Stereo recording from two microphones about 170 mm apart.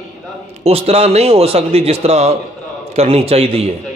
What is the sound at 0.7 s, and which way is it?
A man's voice, 35° right (ahead or behind).